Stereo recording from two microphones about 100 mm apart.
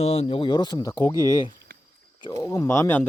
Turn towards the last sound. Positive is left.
turn(degrees=25)  # may be behind; listen again after turning